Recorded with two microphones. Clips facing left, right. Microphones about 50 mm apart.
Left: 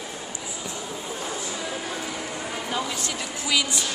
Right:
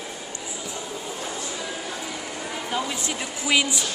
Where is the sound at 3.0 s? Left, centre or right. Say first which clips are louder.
Right 1 dB; right.